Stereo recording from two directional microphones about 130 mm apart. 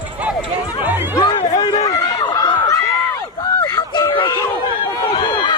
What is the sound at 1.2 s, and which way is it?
Music, 40° left (ahead or behind).